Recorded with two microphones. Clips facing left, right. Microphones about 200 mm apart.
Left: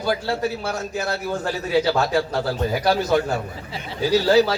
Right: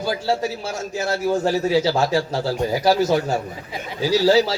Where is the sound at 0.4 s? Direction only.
60° left (ahead or behind).